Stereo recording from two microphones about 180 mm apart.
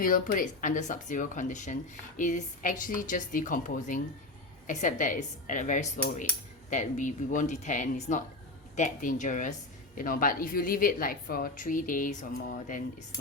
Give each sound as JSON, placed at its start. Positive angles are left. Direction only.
{"t": 0.0, "sound": "a woman's voice", "side_deg": 50}